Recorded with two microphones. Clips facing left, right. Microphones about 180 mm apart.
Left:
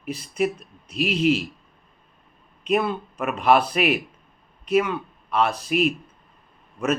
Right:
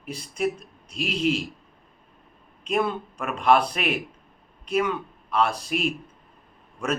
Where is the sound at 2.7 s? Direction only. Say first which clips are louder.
Left 2 dB; 5° left (ahead or behind).